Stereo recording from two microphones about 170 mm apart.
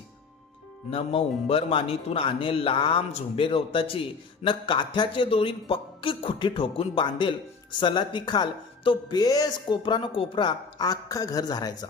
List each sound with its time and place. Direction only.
0.9 s speech: 35° left (ahead or behind)